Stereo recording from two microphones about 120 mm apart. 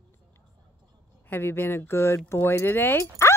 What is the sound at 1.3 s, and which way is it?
Speech, 20° left (ahead or behind).